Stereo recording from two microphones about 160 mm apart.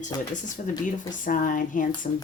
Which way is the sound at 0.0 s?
50° left (ahead or behind).